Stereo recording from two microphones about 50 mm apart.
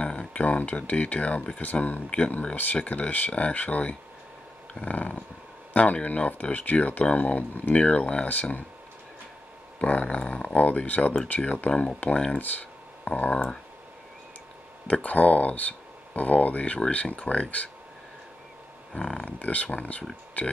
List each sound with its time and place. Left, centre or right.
0.3 s speech: left
2.0 s speech: left
7.7 s speech: left
9.8 s speech: left
14.9 s speech: left
18.9 s speech: centre
19.2 s speech: left